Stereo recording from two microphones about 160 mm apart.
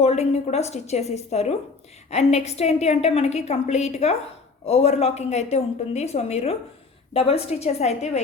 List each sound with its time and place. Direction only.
0.0 s a woman's voice: 40° left (ahead or behind)